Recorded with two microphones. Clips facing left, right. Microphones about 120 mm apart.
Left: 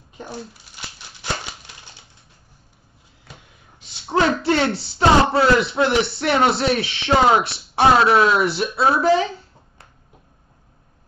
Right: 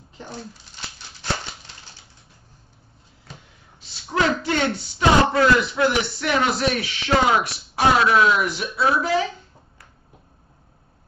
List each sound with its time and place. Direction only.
4.1 s speech: 30° left (ahead or behind)